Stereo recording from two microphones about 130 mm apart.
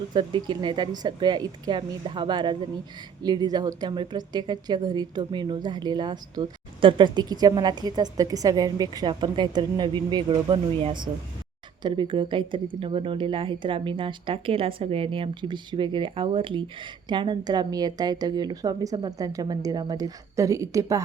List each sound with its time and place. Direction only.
0.1 s a woman's voice: 40° right (ahead or behind)